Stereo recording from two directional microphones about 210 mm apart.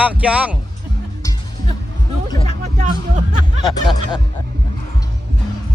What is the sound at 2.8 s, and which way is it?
Music, 35° right (ahead or behind).